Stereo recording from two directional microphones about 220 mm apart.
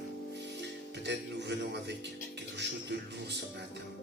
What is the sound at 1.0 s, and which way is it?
Music, 50° right (ahead or behind).